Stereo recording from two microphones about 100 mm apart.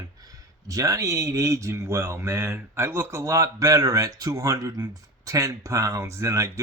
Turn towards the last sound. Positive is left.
turn(degrees=-30)  # may be behind; listen again after turning